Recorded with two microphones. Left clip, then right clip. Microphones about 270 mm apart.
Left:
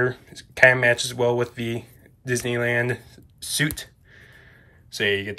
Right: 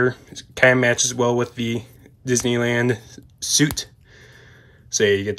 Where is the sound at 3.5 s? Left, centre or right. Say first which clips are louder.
Right 5 dB; centre.